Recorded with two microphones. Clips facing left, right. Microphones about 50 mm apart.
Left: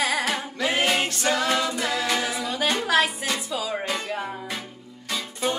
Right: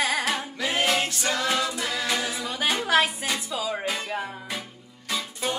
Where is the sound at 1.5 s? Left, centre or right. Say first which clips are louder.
Left 2 dB; centre.